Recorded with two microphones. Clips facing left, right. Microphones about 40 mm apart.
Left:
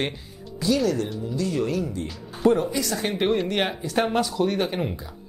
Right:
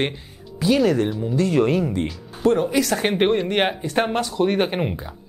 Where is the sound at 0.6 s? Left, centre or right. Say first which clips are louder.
Right 5 dB; right.